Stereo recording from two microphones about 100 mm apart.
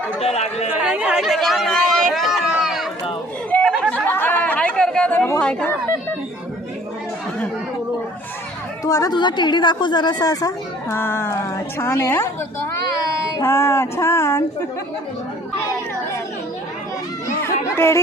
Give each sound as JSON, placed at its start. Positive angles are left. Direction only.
{"t": 0.2, "sound": "speech", "side_deg": 90}
{"t": 0.8, "sound": "speech", "side_deg": -10}
{"t": 1.2, "sound": "run", "side_deg": 0}
{"t": 3.5, "sound": "chatter", "side_deg": 15}
{"t": 5.4, "sound": "speech", "side_deg": 10}
{"t": 8.8, "sound": "speech", "side_deg": 35}
{"t": 9.1, "sound": "a woman's voice", "side_deg": 50}
{"t": 13.4, "sound": "a sound", "side_deg": 25}
{"t": 17.4, "sound": "music", "side_deg": 25}